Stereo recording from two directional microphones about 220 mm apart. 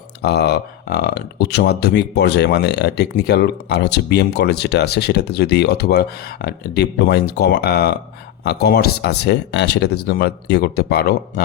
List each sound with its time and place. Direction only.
0.2 s speech: 50° left (ahead or behind)